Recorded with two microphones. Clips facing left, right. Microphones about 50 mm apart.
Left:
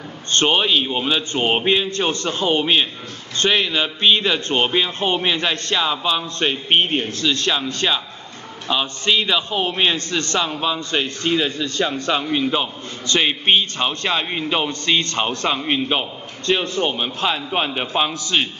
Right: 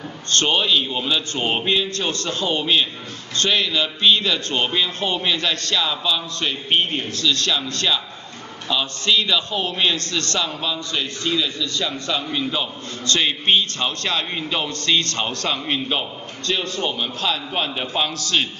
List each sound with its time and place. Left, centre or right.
0.3 s a man's voice: left